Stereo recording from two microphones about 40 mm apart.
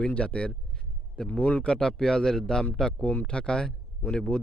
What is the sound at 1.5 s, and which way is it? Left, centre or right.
A man's voice, left.